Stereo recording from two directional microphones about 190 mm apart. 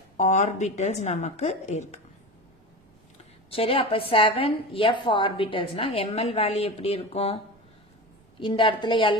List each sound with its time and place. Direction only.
0.2 s a woman's voice: 40° left (ahead or behind)
3.4 s a woman's voice: 30° left (ahead or behind)
8.4 s a woman's voice: 25° left (ahead or behind)